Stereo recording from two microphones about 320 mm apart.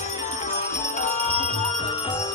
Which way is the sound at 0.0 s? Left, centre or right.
Left.